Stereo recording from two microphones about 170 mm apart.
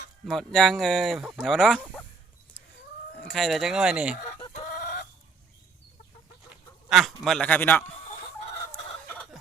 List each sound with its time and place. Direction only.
0.3 s speech: centre (ahead or behind)
3.2 s speech: centre (ahead or behind)
4.7 s chicken: 65° left (ahead or behind)
6.8 s a man's voice: centre (ahead or behind)
8.4 s chicken: 40° left (ahead or behind)
9.0 s fowl: 5° left (ahead or behind)